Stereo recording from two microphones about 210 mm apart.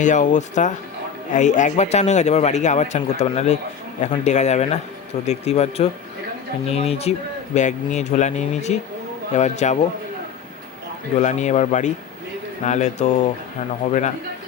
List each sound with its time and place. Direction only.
0.0 s a man's voice: 35° left (ahead or behind)
11.2 s a man's voice: 35° left (ahead or behind)